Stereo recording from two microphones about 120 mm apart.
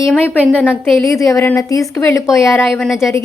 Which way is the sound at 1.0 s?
25° left (ahead or behind).